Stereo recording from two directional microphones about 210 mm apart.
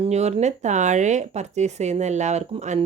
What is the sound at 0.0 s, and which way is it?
Speech, 30° right (ahead or behind).